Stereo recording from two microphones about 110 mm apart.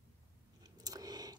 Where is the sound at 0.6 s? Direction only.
35° right (ahead or behind).